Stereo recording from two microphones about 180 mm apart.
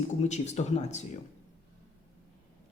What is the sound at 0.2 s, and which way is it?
Speech, 40° left (ahead or behind).